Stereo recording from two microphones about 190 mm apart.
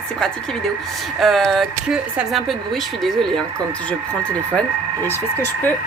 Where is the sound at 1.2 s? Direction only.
Centre (ahead or behind).